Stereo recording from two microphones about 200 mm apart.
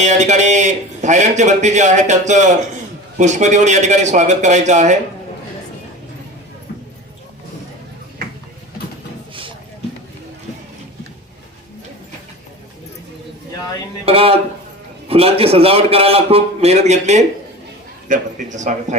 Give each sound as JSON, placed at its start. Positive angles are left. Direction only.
{"t": 0.0, "sound": "a man's voice", "side_deg": -35}
{"t": 9.3, "sound": "a sound", "side_deg": -25}
{"t": 14.0, "sound": "a man's voice", "side_deg": -30}